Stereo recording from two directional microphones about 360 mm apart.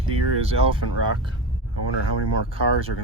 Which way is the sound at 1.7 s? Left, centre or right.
Left.